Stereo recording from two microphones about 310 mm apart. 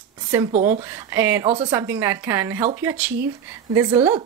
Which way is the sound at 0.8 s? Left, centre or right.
Centre.